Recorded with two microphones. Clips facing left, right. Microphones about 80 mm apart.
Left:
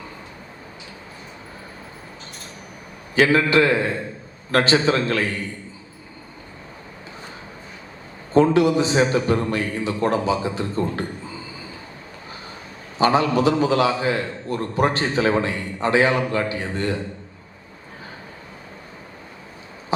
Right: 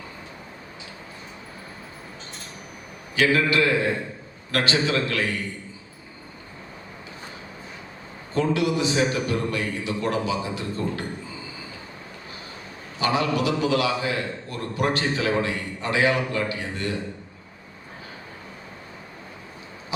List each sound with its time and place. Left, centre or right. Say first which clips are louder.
3.2 s a man's voice: left 4 dB; left
8.3 s a man's voice: left 7 dB; left
13.0 s a man's voice: left 5 dB; left